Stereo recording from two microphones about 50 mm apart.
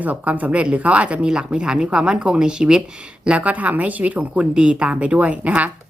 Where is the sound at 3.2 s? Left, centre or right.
Right.